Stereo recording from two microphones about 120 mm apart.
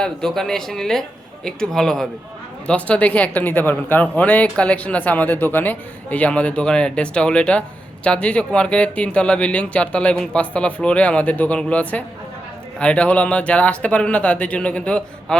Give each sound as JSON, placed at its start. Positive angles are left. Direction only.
{"t": 0.0, "sound": "speech", "side_deg": 5}